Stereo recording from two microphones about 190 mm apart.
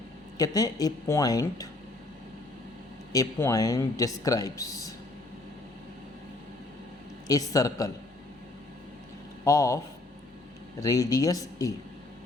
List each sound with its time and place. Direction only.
0.3 s speech: 20° left (ahead or behind)
3.1 s speech: 15° left (ahead or behind)
7.3 s speech: 20° left (ahead or behind)
9.4 s speech: 15° left (ahead or behind)